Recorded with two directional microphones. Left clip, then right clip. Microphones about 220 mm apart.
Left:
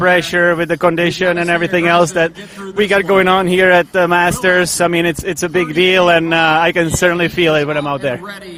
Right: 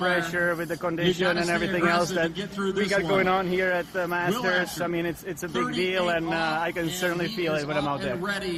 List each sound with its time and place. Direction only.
0.0 s a man's voice: 45° left (ahead or behind)